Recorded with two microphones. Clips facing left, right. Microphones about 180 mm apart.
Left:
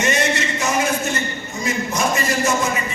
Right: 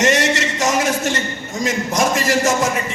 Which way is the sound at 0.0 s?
90° right.